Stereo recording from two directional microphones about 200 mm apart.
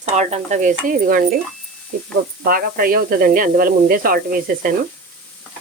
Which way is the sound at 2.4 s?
45° right (ahead or behind).